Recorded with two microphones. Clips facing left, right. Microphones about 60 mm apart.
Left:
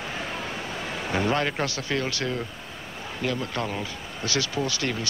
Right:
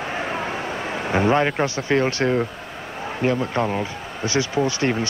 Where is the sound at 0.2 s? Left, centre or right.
Right.